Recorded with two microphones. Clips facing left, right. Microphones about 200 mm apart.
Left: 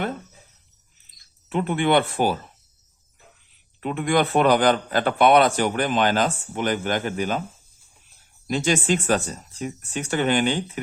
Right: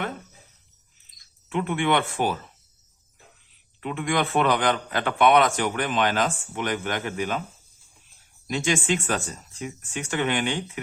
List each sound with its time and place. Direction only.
1.5 s a man's voice: 35° left (ahead or behind)
3.8 s a man's voice: 40° left (ahead or behind)
8.4 s a man's voice: 35° left (ahead or behind)